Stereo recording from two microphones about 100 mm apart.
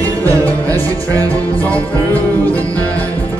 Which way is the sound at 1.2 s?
15° left (ahead or behind).